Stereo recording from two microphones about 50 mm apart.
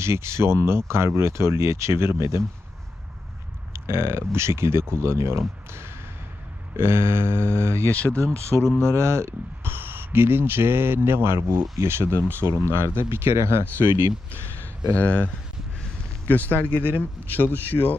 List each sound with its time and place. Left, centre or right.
0.0 s speech: right
3.7 s speech: right
7.9 s speech: left
8.8 s speech: right
9.7 s speech: right
14.8 s speech: left